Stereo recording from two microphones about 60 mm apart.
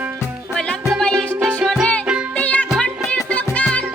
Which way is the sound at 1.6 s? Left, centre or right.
Right.